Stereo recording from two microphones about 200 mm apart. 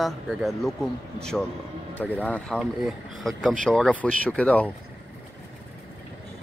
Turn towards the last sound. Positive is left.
turn(degrees=5)  # may be behind; listen again after turning